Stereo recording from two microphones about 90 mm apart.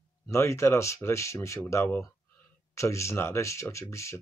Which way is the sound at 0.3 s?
30° left (ahead or behind).